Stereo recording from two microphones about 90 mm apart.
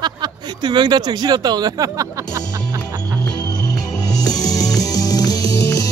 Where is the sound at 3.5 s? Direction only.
45° left (ahead or behind).